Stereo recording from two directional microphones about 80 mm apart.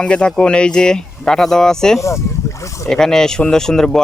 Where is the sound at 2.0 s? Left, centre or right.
Left.